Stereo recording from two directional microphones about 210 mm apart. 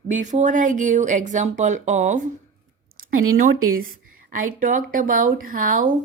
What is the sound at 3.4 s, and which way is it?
Speech, 40° right (ahead or behind).